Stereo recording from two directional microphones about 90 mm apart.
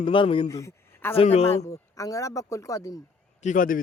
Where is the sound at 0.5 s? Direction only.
35° left (ahead or behind).